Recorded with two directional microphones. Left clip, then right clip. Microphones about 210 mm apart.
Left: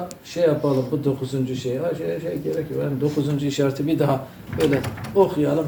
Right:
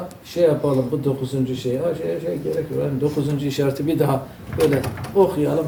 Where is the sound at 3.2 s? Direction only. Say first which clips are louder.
Even; centre (ahead or behind).